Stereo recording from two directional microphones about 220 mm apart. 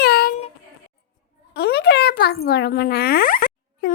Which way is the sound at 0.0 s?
45° left (ahead or behind).